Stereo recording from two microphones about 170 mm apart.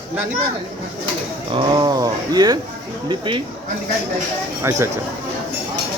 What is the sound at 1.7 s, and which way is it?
Speech, 25° right (ahead or behind).